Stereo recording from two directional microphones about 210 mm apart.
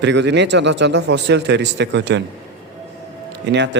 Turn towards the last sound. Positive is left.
turn(degrees=-55)  # may be behind; listen again after turning